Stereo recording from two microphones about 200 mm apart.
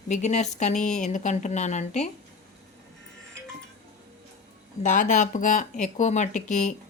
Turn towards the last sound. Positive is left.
turn(degrees=35)  # may be behind; listen again after turning